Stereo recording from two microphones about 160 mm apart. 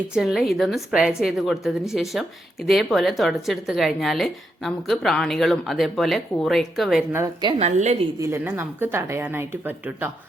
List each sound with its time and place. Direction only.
0.1 s a woman's voice: 5° right (ahead or behind)
7.6 s a woman's voice: 45° right (ahead or behind)
8.2 s speech: 15° right (ahead or behind)